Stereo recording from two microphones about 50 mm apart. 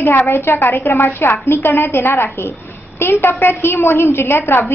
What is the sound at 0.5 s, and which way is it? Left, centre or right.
A woman's voice, left.